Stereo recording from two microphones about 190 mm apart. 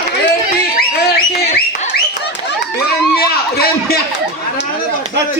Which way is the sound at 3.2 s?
55° left (ahead or behind).